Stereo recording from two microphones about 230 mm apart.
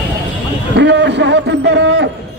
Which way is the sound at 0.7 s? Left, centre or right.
Right.